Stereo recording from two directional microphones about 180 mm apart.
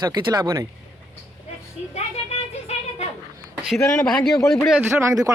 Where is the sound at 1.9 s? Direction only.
35° left (ahead or behind).